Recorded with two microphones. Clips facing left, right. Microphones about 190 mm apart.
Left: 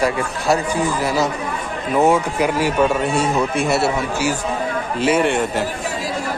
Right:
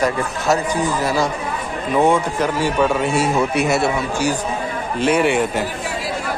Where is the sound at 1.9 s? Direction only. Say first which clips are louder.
Even; 5° left (ahead or behind).